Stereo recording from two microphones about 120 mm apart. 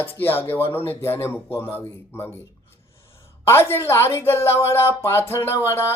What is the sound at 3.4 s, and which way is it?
Speech, 20° left (ahead or behind).